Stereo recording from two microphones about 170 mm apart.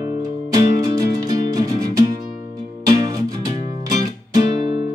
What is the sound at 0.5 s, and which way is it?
Music, 20° right (ahead or behind).